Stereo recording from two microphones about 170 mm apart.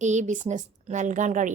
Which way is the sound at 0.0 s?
45° right (ahead or behind).